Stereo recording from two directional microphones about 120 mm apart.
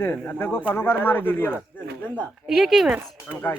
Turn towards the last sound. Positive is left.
turn(degrees=20)  # may be behind; listen again after turning